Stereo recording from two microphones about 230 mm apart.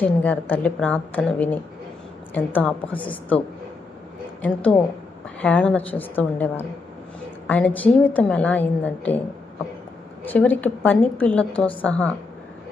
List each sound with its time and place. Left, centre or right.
0.0 s a woman's voice: centre
4.4 s a woman's voice: centre
10.2 s a woman's voice: centre